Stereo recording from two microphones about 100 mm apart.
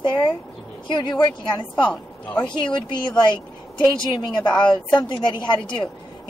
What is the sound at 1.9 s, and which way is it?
Speech, 10° left (ahead or behind).